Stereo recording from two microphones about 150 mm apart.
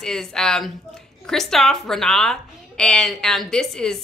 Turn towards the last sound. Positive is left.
turn(degrees=5)  # may be behind; listen again after turning